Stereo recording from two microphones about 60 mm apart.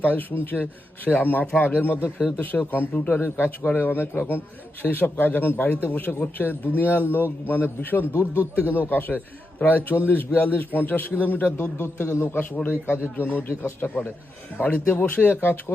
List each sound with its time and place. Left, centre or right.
0.0 s a man's voice: left
3.1 s a man's voice: left
11.8 s a man's voice: left
14.6 s speech: left
14.9 s a man's voice: left